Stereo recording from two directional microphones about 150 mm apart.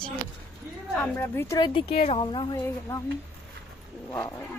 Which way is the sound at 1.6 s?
35° left (ahead or behind).